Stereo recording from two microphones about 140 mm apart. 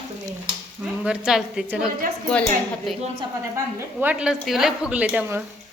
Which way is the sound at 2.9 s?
Centre (ahead or behind).